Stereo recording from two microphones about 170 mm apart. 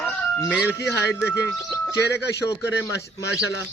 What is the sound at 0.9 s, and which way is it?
Speech, 10° left (ahead or behind).